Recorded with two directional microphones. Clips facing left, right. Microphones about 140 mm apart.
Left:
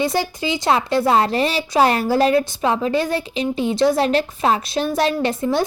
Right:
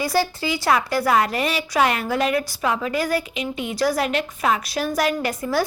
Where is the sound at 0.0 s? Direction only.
20° left (ahead or behind).